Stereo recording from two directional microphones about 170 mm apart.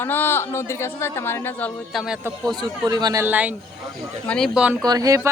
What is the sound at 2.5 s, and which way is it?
Speech, 25° right (ahead or behind).